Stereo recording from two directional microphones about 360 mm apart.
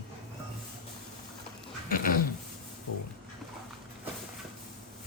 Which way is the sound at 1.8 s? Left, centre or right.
Left.